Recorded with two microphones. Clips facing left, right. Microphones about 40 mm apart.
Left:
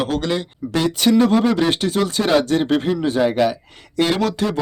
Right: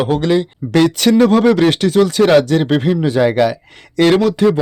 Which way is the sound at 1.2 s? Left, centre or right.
Right.